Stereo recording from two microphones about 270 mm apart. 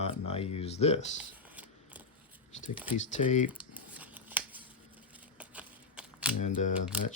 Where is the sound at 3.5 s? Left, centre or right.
Centre.